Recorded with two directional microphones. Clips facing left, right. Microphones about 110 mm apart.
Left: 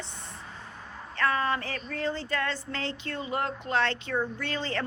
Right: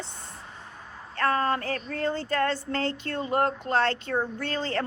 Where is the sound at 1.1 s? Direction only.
40° right (ahead or behind).